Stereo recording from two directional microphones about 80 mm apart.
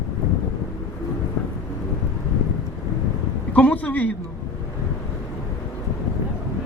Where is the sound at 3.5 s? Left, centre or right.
Centre.